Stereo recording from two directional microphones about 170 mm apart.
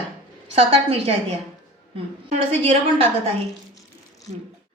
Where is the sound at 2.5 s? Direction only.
35° right (ahead or behind).